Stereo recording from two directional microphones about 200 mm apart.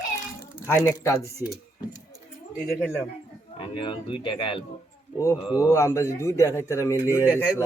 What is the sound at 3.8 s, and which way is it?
Speech, 25° left (ahead or behind).